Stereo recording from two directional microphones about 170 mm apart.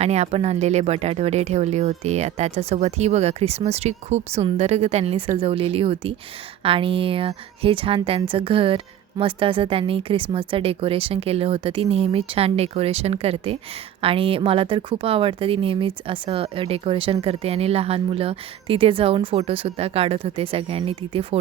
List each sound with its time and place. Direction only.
0.0 s speech: 40° right (ahead or behind)